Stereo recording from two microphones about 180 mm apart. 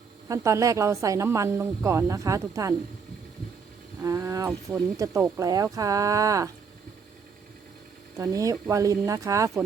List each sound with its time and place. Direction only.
0.3 s a woman's voice: 15° right (ahead or behind)
4.0 s a woman's voice: 15° right (ahead or behind)
8.2 s a woman's voice: 20° right (ahead or behind)